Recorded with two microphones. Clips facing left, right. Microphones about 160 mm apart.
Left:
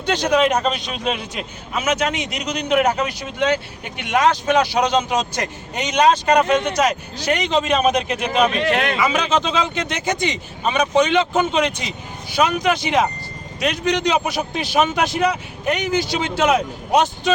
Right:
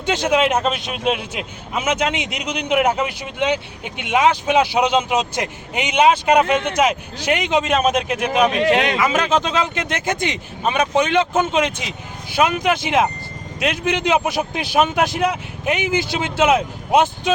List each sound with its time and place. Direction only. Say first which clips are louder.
0.1 s a man's voice: even; 5° right (ahead or behind)
8.4 s speech: right 3 dB; 20° right (ahead or behind)
9.0 s a man's voice: right 1 dB; 5° right (ahead or behind)